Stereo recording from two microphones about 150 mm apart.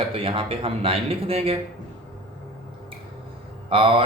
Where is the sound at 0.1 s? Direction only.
35° right (ahead or behind).